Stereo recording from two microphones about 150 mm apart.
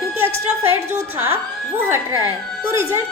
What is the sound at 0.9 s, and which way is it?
A woman's voice, 20° right (ahead or behind).